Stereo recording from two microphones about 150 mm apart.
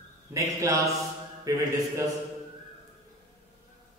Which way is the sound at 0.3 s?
20° right (ahead or behind).